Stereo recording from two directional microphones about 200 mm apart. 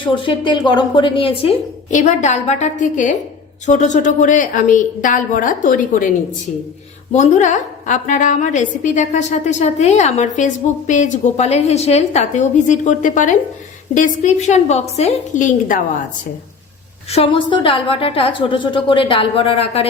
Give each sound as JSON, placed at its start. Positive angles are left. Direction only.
{"t": 0.0, "sound": "a woman's voice", "side_deg": 25}
{"t": 7.1, "sound": "a woman's voice", "side_deg": 35}
{"t": 17.1, "sound": "a woman's voice", "side_deg": 25}